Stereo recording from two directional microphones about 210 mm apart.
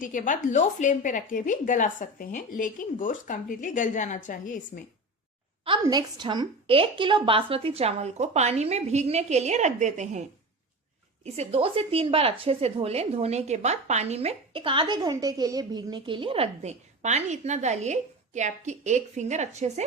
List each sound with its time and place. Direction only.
0.0 s a woman's voice: 40° left (ahead or behind)
5.8 s a woman's voice: 20° right (ahead or behind)